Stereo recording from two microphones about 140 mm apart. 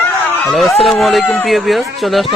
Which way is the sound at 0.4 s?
Centre (ahead or behind).